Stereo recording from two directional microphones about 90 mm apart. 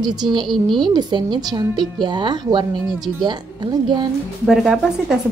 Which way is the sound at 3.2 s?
55° right (ahead or behind).